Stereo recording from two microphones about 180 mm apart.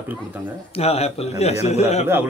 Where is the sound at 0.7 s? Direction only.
35° left (ahead or behind).